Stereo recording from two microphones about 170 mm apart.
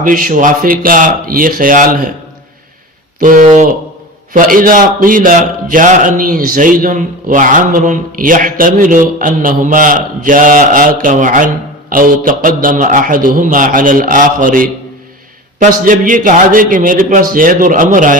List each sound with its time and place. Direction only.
0.0 s speech: 55° right (ahead or behind)
3.2 s a man's voice: 50° right (ahead or behind)